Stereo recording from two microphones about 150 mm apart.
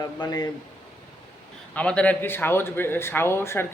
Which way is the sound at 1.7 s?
10° left (ahead or behind).